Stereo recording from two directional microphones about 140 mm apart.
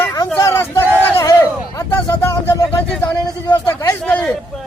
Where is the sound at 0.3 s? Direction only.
20° left (ahead or behind).